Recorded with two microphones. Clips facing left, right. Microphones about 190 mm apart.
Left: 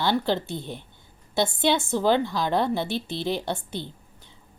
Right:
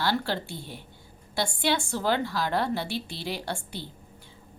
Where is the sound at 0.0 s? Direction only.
20° left (ahead or behind).